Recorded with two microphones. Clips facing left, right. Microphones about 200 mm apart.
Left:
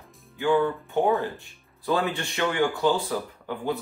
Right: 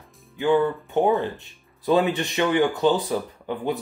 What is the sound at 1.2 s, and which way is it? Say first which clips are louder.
Speech: right 2 dB; 20° right (ahead or behind).